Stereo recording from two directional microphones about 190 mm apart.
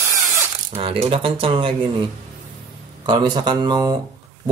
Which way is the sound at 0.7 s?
30° right (ahead or behind).